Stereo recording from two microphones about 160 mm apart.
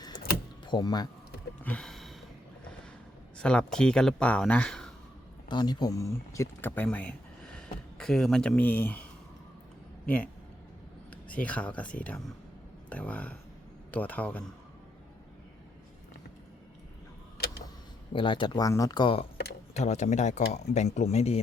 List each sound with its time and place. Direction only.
0.6 s speech: 25° left (ahead or behind)
1.6 s a sound: 5° left (ahead or behind)
3.3 s speech: 5° left (ahead or behind)
5.5 s speech: 25° left (ahead or behind); by 9.0 s 10° left (ahead or behind)
11.1 s a man's voice: 10° left (ahead or behind)
18.1 s speech: 30° left (ahead or behind)
19.7 s speech: 45° left (ahead or behind)